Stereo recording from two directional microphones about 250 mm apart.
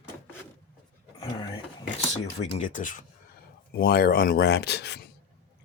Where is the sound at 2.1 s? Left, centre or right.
Left.